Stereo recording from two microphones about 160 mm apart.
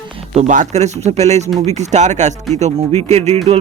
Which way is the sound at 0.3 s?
50° right (ahead or behind).